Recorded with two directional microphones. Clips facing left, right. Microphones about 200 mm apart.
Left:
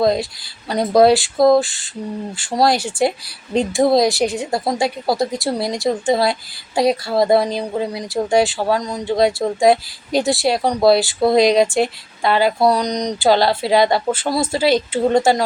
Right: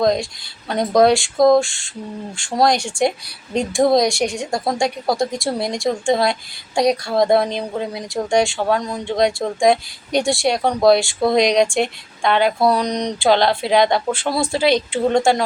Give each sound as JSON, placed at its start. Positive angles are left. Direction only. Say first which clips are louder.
{"t": 0.0, "sound": "speech", "louder": "left 1 dB", "side_deg": 5}